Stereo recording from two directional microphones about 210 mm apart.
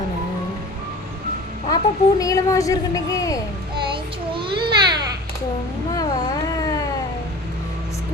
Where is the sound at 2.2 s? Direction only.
15° left (ahead or behind).